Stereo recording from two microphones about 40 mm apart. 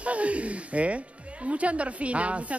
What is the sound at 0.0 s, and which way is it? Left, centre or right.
Speech, right.